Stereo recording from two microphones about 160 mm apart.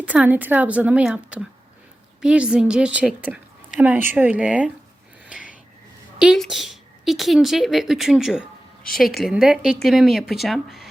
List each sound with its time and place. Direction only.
0.0 s a woman's voice: 10° right (ahead or behind)
6.1 s a woman's voice: centre (ahead or behind)